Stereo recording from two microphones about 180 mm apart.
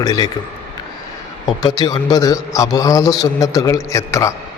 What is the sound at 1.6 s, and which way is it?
A man's voice, 20° left (ahead or behind).